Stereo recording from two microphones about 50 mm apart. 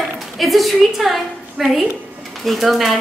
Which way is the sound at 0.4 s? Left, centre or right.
Centre.